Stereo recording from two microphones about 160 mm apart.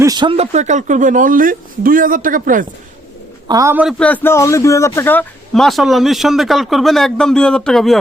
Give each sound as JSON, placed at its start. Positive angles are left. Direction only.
{"t": 0.0, "sound": "speech", "side_deg": -25}
{"t": 3.5, "sound": "a man's voice", "side_deg": -20}
{"t": 3.9, "sound": "speech", "side_deg": 10}
{"t": 5.5, "sound": "a man's voice", "side_deg": 0}